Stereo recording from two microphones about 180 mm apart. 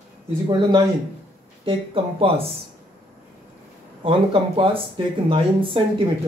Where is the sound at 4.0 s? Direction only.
30° right (ahead or behind).